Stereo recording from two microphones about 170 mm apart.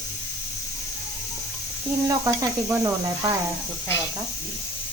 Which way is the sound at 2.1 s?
15° right (ahead or behind).